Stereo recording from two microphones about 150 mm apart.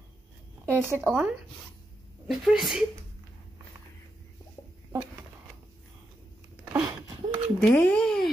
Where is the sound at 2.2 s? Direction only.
Centre (ahead or behind).